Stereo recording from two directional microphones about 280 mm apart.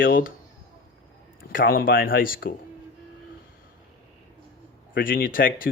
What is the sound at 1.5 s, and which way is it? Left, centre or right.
Speech, left.